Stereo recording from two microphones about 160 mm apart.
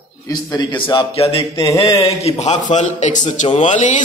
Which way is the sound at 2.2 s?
45° left (ahead or behind).